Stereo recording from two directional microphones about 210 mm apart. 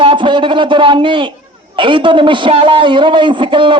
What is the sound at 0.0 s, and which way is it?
A man's voice, 25° right (ahead or behind).